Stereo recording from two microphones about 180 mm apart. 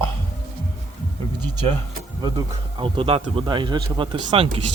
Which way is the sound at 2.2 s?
20° right (ahead or behind).